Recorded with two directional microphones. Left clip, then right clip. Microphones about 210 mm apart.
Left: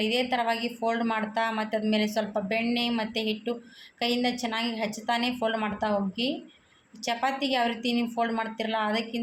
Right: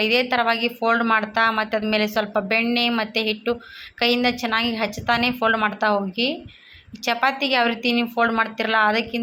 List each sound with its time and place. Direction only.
0.0 s speech: 10° right (ahead or behind)